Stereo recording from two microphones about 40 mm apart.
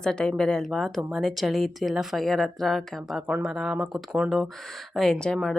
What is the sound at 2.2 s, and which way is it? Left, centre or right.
A woman's voice, centre.